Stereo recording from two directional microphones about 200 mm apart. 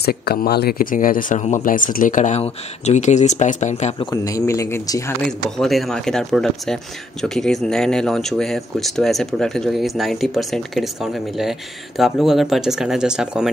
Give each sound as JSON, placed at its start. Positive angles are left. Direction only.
{"t": 0.0, "sound": "speech", "side_deg": 50}
{"t": 4.1, "sound": "speech", "side_deg": 15}
{"t": 5.6, "sound": "speech", "side_deg": 0}